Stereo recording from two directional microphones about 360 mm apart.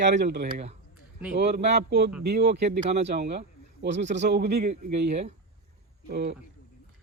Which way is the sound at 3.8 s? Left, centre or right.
Right.